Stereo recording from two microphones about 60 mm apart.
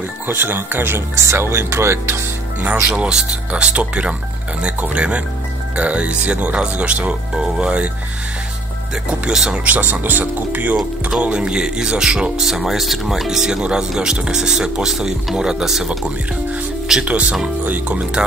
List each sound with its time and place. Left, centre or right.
0.3 s speech: right
2.6 s speech: right
3.1 s speech: centre
9.3 s speech: centre
9.7 s speech: right
11.1 s speech: centre
17.0 s speech: centre